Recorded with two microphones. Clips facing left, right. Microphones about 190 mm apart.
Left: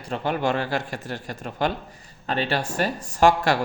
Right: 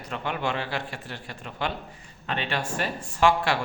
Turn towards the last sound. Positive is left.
turn(degrees=40)  # may be behind; listen again after turning